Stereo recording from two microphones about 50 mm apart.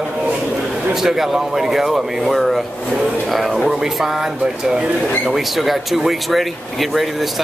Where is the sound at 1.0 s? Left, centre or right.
Centre.